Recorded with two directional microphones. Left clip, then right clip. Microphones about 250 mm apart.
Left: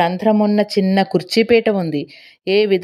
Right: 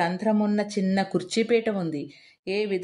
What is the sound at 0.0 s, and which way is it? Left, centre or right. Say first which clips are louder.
Speech: left 9 dB; left.